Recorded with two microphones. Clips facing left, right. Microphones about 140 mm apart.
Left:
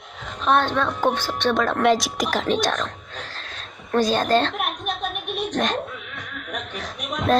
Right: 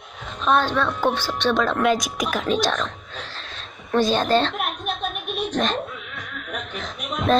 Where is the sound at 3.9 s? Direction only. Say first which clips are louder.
Even; 45° left (ahead or behind).